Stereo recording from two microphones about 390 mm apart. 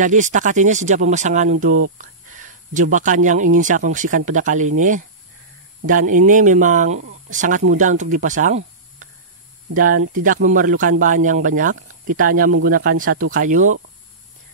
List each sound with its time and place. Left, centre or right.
0.0 s speech: centre